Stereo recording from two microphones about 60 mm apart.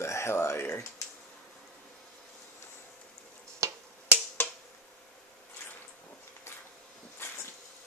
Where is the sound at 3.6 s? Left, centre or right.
Right.